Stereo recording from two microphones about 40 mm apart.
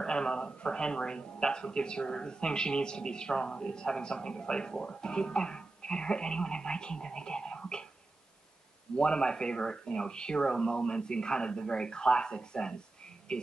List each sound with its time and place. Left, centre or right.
0.0 s a sound: centre
0.7 s speech: left
8.9 s speech: left